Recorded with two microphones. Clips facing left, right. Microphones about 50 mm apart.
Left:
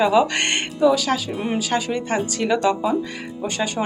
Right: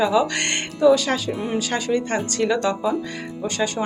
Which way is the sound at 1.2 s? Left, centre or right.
Left.